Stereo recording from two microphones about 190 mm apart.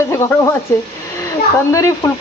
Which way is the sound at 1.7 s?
15° left (ahead or behind).